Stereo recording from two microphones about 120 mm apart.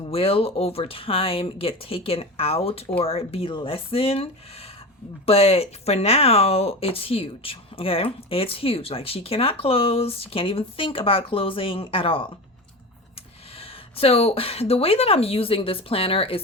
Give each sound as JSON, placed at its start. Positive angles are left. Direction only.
{"t": 0.0, "sound": "speech", "side_deg": 55}
{"t": 13.6, "sound": "speech", "side_deg": 55}